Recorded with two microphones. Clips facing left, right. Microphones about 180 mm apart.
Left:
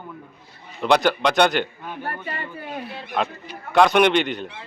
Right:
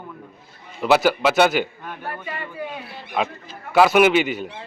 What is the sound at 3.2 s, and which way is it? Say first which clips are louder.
A man's voice: right 1 dB; 5° right (ahead or behind).